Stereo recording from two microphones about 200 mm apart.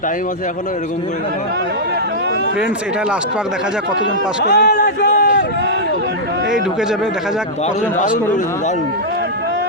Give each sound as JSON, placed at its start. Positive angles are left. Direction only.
{"t": 4.4, "sound": "a man's voice", "side_deg": 55}
{"t": 7.9, "sound": "speech", "side_deg": 40}